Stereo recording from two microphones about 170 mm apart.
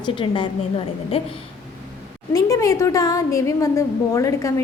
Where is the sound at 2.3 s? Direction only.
15° left (ahead or behind).